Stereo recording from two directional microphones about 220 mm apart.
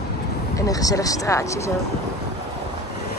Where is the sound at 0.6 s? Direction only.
15° left (ahead or behind).